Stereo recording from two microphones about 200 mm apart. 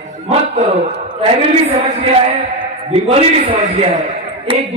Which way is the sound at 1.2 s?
30° right (ahead or behind).